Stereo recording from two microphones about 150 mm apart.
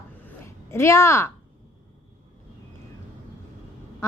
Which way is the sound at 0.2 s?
15° left (ahead or behind).